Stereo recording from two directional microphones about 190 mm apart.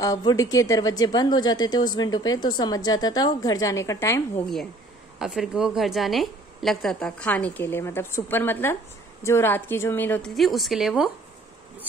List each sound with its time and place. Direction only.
0.0 s a woman's voice: 20° left (ahead or behind)
5.2 s a woman's voice: centre (ahead or behind)